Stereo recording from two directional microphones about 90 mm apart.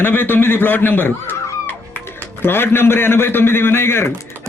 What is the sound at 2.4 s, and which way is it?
A man's voice, 25° left (ahead or behind).